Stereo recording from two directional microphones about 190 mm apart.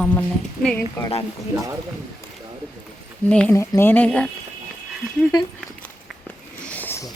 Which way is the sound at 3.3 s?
5° left (ahead or behind).